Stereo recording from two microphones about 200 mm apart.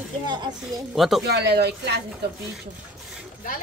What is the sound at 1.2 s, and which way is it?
Speech, 55° right (ahead or behind).